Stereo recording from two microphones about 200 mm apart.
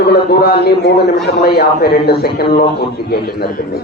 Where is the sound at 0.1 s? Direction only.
55° left (ahead or behind).